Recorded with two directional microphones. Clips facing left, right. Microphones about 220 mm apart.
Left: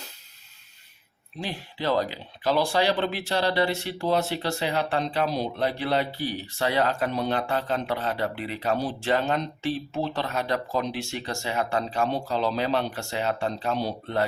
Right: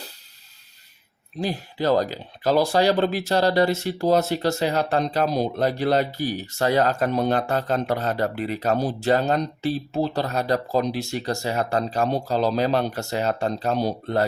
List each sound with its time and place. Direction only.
1.4 s speech: 40° right (ahead or behind)